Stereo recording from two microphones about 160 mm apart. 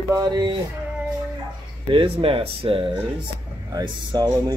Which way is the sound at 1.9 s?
35° right (ahead or behind).